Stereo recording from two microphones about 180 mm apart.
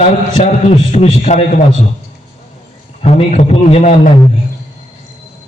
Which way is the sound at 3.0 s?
35° left (ahead or behind).